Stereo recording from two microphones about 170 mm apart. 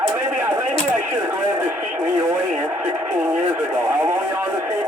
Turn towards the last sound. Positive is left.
turn(degrees=-15)  # may be behind; listen again after turning